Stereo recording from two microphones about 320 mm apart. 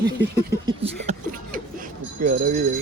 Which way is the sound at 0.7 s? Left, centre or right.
Centre.